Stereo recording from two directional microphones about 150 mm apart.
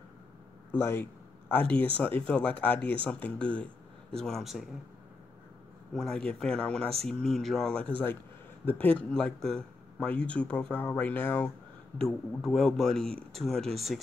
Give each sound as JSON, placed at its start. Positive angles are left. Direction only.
{"t": 0.7, "sound": "a man's voice", "side_deg": 15}
{"t": 5.9, "sound": "speech", "side_deg": 5}
{"t": 12.0, "sound": "speech", "side_deg": 0}